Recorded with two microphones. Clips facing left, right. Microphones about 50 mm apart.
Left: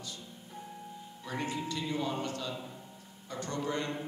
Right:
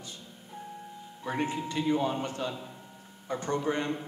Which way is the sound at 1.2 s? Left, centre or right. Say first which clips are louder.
Right 5 dB; right.